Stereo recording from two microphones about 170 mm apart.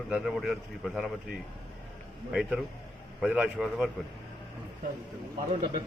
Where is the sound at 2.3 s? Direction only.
5° right (ahead or behind).